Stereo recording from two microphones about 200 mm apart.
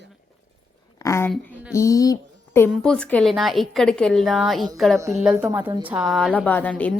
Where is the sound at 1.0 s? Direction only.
15° left (ahead or behind).